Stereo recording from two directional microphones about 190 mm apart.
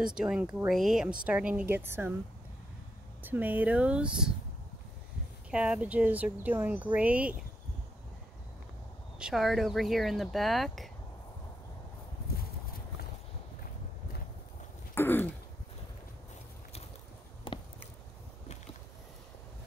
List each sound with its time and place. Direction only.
0.0 s speech: 5° right (ahead or behind)
3.3 s speech: 10° right (ahead or behind)
5.5 s speech: 5° right (ahead or behind)
9.2 s speech: centre (ahead or behind)
15.0 s throat clearing: 10° left (ahead or behind)
17.5 s a sound: 25° left (ahead or behind)